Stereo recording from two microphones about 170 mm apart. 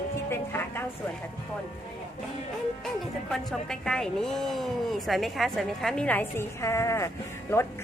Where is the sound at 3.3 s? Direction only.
5° left (ahead or behind).